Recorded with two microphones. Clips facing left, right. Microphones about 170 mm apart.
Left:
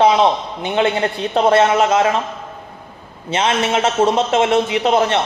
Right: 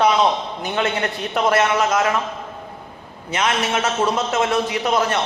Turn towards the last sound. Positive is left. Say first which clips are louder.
# left 4 dB
turn(degrees=25)  # may be behind; listen again after turning